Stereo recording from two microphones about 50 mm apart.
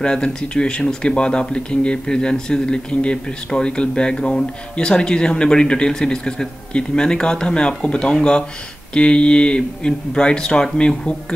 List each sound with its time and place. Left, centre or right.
0.0 s speech: centre